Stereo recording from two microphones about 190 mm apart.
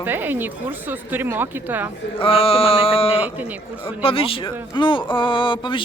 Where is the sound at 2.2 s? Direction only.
30° left (ahead or behind).